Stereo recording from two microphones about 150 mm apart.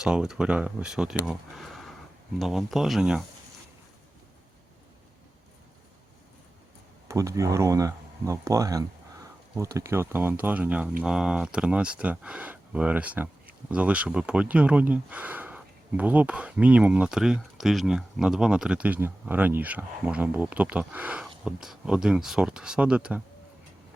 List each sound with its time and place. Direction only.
0.0 s speech: 5° right (ahead or behind)
7.1 s speech: 20° right (ahead or behind)